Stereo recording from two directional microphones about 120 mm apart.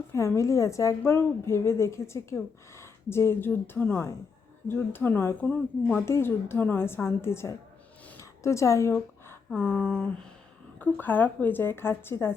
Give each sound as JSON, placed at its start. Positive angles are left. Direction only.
{"t": 0.1, "sound": "a woman's voice", "side_deg": 20}
{"t": 8.2, "sound": "a sound", "side_deg": 25}
{"t": 9.6, "sound": "a woman's voice", "side_deg": 15}